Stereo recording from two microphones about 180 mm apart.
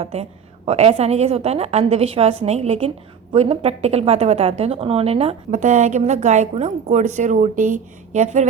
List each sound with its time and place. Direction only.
0.0 s a woman's voice: 35° right (ahead or behind)